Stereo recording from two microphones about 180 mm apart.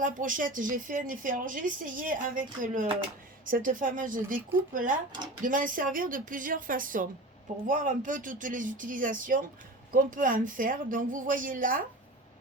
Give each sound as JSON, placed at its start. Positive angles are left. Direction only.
{"t": 0.0, "sound": "a woman's voice", "side_deg": -50}